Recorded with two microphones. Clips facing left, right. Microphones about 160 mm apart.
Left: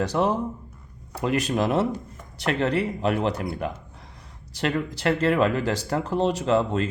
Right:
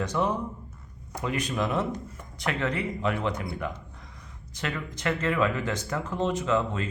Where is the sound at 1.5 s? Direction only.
35° left (ahead or behind).